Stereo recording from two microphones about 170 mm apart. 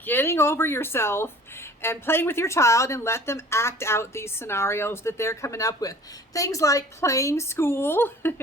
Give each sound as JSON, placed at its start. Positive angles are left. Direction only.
{"t": 0.0, "sound": "speech", "side_deg": 10}